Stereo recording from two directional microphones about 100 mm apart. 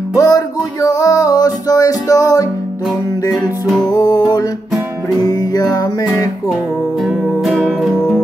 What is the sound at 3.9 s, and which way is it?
Music, 40° left (ahead or behind).